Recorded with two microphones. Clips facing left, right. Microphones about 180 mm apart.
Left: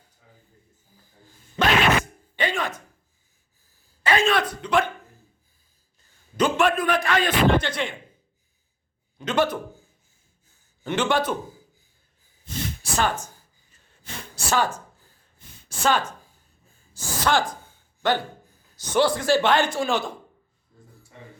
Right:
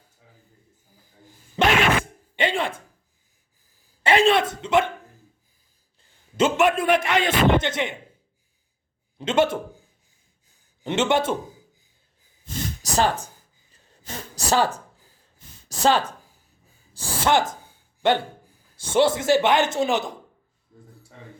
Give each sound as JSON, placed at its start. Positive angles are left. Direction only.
{"t": 2.3, "sound": "a sound", "side_deg": -25}
{"t": 4.0, "sound": "a man's voice", "side_deg": -25}
{"t": 6.3, "sound": "a man's voice", "side_deg": -20}
{"t": 9.1, "sound": "a man's voice", "side_deg": -25}
{"t": 10.8, "sound": "a man's voice", "side_deg": -25}
{"t": 12.8, "sound": "speech", "side_deg": -35}
{"t": 13.7, "sound": "a sound", "side_deg": -40}
{"t": 15.7, "sound": "a man's voice", "side_deg": -35}